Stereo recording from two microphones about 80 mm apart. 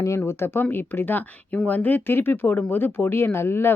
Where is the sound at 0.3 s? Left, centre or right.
Left.